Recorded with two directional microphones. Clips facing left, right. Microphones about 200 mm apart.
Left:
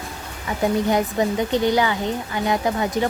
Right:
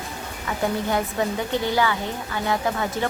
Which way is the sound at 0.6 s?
15° left (ahead or behind).